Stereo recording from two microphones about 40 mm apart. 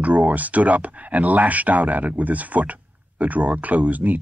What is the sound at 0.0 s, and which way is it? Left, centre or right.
Speech, right.